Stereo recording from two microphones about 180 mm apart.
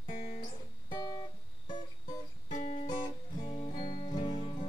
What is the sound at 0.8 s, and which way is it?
Guitar, 20° left (ahead or behind).